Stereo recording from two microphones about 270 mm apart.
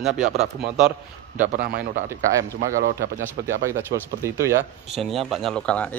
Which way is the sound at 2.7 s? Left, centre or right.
Right.